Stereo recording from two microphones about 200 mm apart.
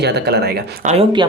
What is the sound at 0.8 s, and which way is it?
Speech, 25° right (ahead or behind).